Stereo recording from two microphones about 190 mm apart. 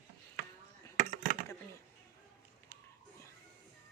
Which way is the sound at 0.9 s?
40° right (ahead or behind).